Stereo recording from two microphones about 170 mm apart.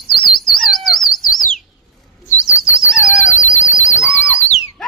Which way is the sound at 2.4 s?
45° left (ahead or behind).